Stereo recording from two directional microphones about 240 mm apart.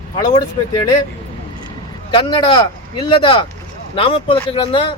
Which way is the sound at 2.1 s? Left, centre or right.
Left.